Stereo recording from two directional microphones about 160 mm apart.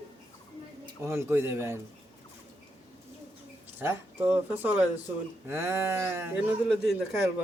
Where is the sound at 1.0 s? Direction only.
15° right (ahead or behind).